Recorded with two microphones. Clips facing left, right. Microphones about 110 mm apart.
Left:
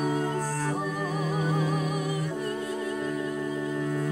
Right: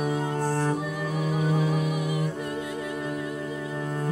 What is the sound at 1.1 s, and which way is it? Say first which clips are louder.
Music: right 4 dB; 40° left (ahead or behind).